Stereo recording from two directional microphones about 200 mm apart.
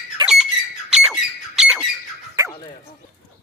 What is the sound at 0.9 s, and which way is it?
Rodents, 5° right (ahead or behind).